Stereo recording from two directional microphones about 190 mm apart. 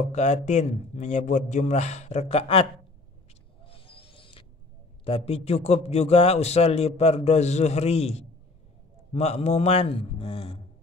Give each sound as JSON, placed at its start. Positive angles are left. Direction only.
{"t": 0.1, "sound": "a man's voice", "side_deg": 35}
{"t": 3.6, "sound": "music", "side_deg": 30}
{"t": 5.0, "sound": "a man's voice", "side_deg": 30}